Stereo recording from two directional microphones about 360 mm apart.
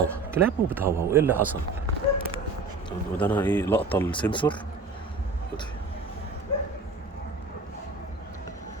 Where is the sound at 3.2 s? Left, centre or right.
Centre.